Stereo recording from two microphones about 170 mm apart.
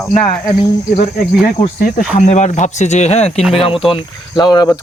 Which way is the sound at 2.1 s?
45° left (ahead or behind).